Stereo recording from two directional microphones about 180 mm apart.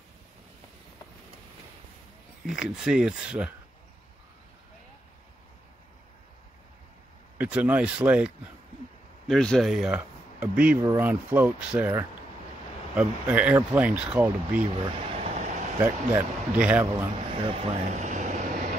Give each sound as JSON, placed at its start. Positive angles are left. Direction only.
{"t": 2.4, "sound": "speech", "side_deg": -5}
{"t": 7.3, "sound": "speech", "side_deg": -10}
{"t": 9.3, "sound": "speech", "side_deg": 0}
{"t": 15.2, "sound": "vehicle", "side_deg": -40}
{"t": 15.8, "sound": "speech", "side_deg": -15}
{"t": 17.3, "sound": "speech", "side_deg": -30}